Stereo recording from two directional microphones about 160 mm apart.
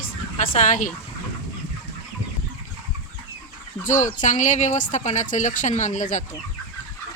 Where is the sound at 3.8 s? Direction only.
50° left (ahead or behind).